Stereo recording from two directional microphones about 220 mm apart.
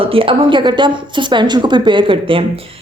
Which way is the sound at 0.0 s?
25° right (ahead or behind).